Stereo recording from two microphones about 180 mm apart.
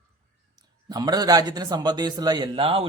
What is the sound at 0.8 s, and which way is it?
A man's voice, 20° right (ahead or behind).